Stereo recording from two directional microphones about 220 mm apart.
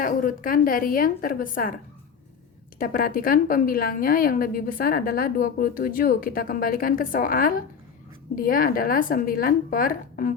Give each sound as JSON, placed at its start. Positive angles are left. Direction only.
{"t": 0.0, "sound": "a woman's voice", "side_deg": 40}
{"t": 2.7, "sound": "a woman's voice", "side_deg": 40}